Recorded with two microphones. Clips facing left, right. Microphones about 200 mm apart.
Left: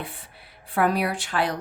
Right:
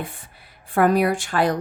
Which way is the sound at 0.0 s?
45° right (ahead or behind).